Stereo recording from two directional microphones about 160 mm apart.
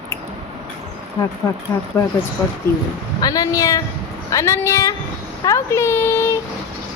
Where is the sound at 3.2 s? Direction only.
25° left (ahead or behind).